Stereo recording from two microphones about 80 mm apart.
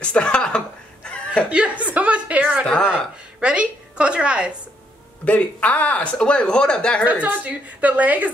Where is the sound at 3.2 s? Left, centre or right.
Centre.